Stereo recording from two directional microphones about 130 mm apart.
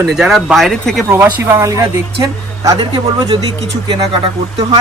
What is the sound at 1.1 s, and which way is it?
Speech, 25° right (ahead or behind).